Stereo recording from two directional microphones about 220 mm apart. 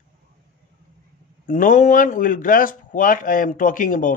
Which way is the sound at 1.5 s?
35° left (ahead or behind).